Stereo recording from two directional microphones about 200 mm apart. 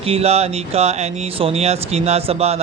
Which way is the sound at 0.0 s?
30° right (ahead or behind).